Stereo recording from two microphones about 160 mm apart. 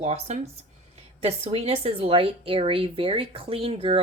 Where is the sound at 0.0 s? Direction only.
40° right (ahead or behind).